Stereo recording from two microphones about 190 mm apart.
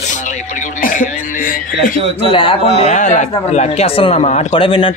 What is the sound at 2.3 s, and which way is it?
A man's voice, 30° left (ahead or behind).